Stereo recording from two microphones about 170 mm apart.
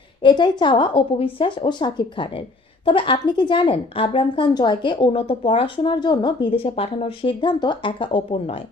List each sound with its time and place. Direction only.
0.2 s a woman's voice: 25° left (ahead or behind)